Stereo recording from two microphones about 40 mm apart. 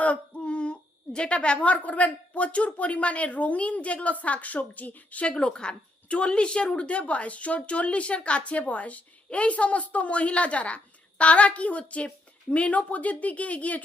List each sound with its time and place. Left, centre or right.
0.3 s a sound: left
1.6 s a woman's voice: left
5.2 s a woman's voice: left